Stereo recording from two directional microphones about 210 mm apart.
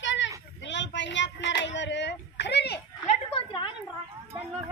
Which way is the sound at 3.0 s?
30° left (ahead or behind).